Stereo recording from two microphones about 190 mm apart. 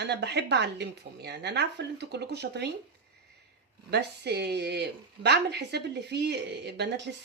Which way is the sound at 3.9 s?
60° right (ahead or behind).